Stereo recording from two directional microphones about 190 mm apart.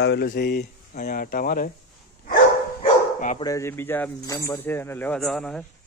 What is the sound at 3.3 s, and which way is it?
Speech, 20° left (ahead or behind).